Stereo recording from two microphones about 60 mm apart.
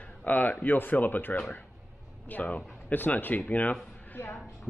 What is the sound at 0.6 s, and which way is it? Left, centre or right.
Speech, left.